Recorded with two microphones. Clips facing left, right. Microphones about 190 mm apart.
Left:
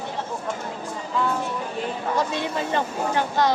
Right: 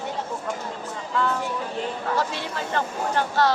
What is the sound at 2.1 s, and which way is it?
Speech, 20° left (ahead or behind).